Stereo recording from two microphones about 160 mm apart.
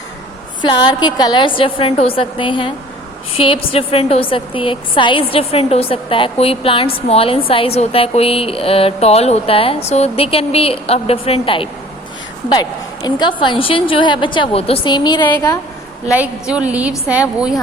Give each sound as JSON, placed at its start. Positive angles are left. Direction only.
{"t": 0.6, "sound": "a woman's voice", "side_deg": 25}
{"t": 16.1, "sound": "a woman's voice", "side_deg": -10}